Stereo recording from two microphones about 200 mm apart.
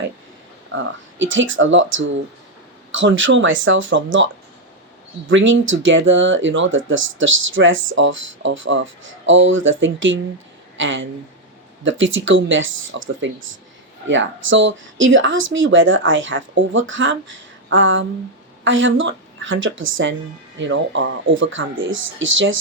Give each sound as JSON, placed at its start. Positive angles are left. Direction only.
{"t": 0.8, "sound": "speech", "side_deg": -70}
{"t": 5.3, "sound": "a woman's voice", "side_deg": -70}
{"t": 17.7, "sound": "a sound", "side_deg": -70}
{"t": 18.6, "sound": "speech", "side_deg": -70}